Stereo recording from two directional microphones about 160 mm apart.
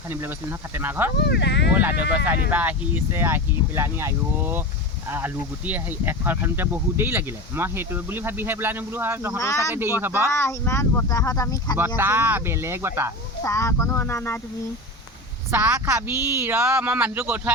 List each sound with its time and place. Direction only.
0.1 s speech: 15° right (ahead or behind)
1.1 s speech: 90° left
1.7 s speech: 10° right (ahead or behind)
9.4 s speech: 20° left (ahead or behind)
9.7 s speech: 15° right (ahead or behind)
10.3 s speech: 15° left (ahead or behind)
11.9 s speech: 15° right (ahead or behind)
13.4 s speech: 20° left (ahead or behind)
15.5 s speech: 10° right (ahead or behind)